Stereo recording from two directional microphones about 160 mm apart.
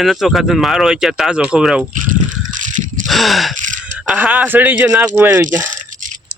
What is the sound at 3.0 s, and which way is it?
Gasp, centre (ahead or behind).